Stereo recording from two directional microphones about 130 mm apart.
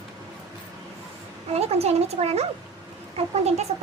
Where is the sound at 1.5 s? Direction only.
55° right (ahead or behind).